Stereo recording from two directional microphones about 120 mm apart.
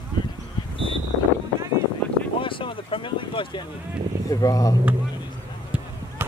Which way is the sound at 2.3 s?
45° left (ahead or behind).